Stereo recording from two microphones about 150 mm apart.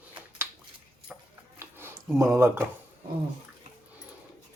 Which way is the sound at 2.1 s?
20° right (ahead or behind).